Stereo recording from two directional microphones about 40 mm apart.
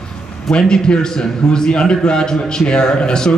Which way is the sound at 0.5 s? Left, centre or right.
Left.